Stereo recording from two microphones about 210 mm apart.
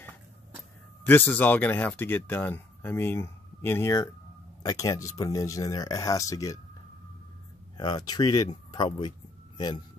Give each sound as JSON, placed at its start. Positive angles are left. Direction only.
{"t": 1.0, "sound": "speech", "side_deg": 10}
{"t": 7.7, "sound": "speech", "side_deg": 20}